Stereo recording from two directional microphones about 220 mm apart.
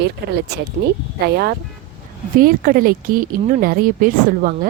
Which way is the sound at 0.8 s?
35° right (ahead or behind).